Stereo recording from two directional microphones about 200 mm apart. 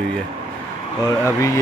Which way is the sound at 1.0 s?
15° left (ahead or behind).